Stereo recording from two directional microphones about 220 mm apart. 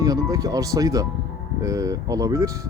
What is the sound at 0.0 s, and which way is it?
Speech, 15° right (ahead or behind).